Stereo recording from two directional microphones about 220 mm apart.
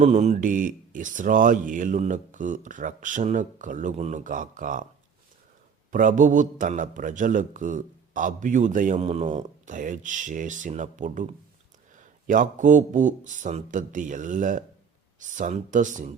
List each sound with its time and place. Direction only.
0.0 s a man's voice: 30° right (ahead or behind)
5.9 s a man's voice: 35° right (ahead or behind)